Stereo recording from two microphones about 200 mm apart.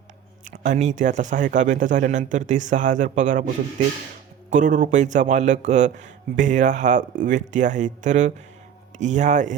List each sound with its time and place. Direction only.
0.5 s speech: 35° right (ahead or behind)